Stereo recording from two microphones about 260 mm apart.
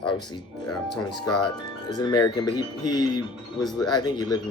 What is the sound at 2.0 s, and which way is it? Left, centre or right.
Speech, centre.